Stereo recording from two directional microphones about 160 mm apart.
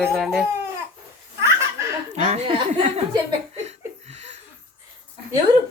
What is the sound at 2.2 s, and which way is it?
Speech, 45° right (ahead or behind).